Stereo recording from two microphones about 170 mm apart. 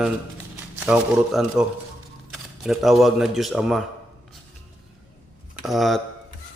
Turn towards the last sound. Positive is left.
turn(degrees=0)  # may be behind; listen again after turning